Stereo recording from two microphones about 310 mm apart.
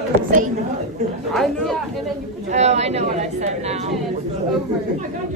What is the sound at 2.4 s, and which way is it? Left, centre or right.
A woman's voice, right.